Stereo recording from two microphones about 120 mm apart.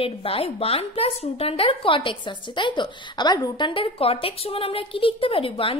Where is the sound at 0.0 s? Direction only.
50° left (ahead or behind).